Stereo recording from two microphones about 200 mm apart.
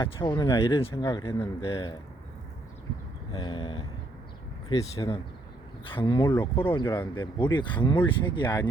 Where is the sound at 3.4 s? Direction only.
25° left (ahead or behind).